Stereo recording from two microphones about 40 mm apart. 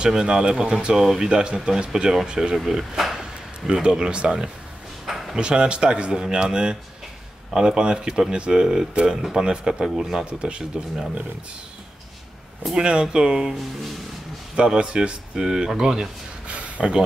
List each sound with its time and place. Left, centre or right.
0.0 s speech: right
0.9 s speech: centre
1.2 s speech: right
2.5 s speech: centre
3.2 s speech: centre
5.0 s a sound: centre
5.4 s speech: right
12.7 s speech: centre
16.4 s a sound: right